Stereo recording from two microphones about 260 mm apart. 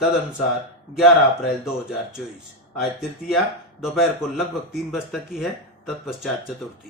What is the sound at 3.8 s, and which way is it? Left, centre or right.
Speech, centre.